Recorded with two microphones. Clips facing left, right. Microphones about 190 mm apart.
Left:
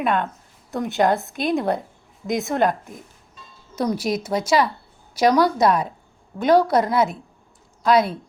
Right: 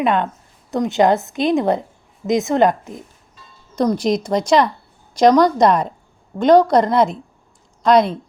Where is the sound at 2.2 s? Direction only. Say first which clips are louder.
Right 6 dB; 35° right (ahead or behind).